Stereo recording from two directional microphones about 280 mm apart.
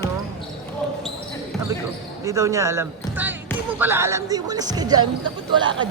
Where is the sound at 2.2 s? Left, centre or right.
Centre.